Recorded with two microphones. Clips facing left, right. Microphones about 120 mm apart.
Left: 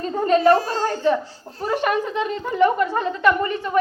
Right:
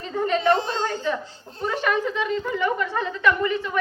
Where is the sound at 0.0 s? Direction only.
40° left (ahead or behind).